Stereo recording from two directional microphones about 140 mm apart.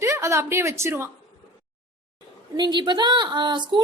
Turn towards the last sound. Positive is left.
turn(degrees=-35)  # may be behind; listen again after turning